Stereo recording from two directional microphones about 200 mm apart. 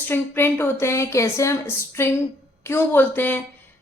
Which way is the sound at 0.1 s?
10° left (ahead or behind).